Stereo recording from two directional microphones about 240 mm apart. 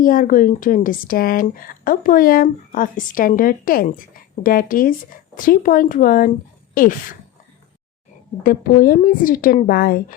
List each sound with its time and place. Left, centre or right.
0.0 s speech: left
8.4 s speech: left